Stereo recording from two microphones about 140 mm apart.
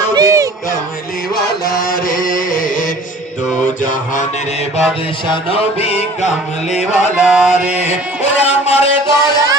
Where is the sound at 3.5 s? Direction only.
65° left (ahead or behind).